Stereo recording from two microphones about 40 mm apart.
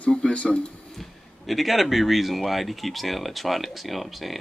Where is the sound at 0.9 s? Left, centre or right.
Centre.